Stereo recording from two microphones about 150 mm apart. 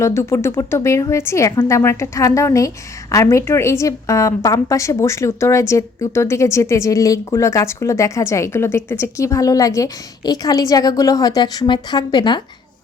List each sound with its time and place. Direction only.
0.0 s a woman's voice: 15° left (ahead or behind)